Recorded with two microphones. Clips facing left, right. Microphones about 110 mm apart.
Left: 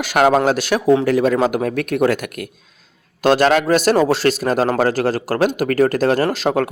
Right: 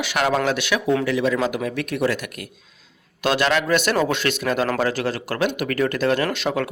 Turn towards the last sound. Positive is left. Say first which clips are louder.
# left 5 dB
turn(degrees=45)  # may be behind; listen again after turning